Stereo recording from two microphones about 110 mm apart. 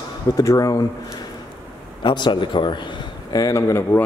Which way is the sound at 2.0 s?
45° left (ahead or behind).